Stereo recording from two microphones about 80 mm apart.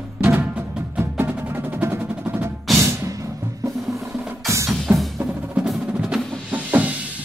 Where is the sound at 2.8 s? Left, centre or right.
Right.